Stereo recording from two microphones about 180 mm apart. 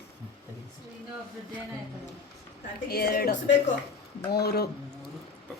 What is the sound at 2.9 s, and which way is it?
A woman's voice, 60° left (ahead or behind).